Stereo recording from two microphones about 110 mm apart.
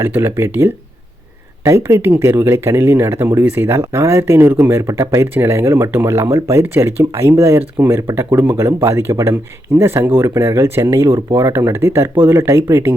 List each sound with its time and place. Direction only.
0.0 s speech: 20° right (ahead or behind)